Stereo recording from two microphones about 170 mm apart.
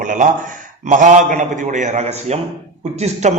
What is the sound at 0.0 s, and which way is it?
A man's voice, 50° right (ahead or behind).